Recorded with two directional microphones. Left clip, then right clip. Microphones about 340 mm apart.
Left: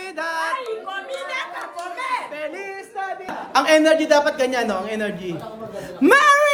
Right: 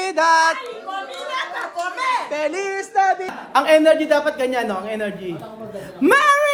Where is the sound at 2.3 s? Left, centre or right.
Centre.